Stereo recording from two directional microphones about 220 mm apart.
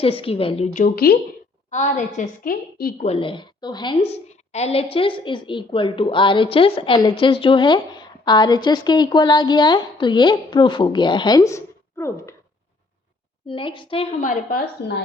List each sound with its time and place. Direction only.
0.0 s a woman's voice: 25° left (ahead or behind); by 1.2 s 45° left (ahead or behind)
1.7 s a woman's voice: 35° left (ahead or behind)
3.1 s a woman's voice: 25° left (ahead or behind)
13.5 s a woman's voice: 25° left (ahead or behind); by 14.9 s 45° left (ahead or behind)